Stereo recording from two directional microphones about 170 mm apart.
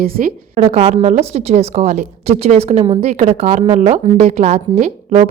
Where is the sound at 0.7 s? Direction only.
40° right (ahead or behind).